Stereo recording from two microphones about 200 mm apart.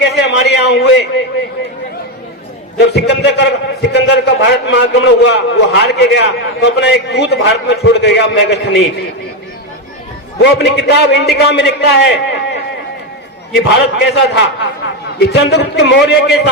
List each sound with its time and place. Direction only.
0.0 s a sound: 55° left (ahead or behind)
2.7 s a man's voice: 55° left (ahead or behind)
10.4 s a man's voice: 60° left (ahead or behind)